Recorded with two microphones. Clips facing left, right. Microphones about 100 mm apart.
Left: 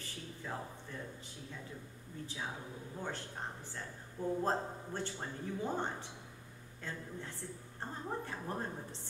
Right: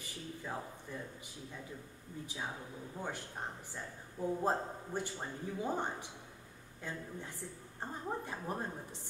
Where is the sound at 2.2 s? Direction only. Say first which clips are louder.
Even; 15° right (ahead or behind).